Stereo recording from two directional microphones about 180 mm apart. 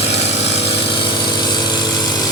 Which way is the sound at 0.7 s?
25° left (ahead or behind).